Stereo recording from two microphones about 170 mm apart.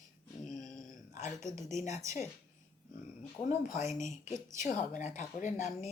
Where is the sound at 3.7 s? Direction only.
45° left (ahead or behind).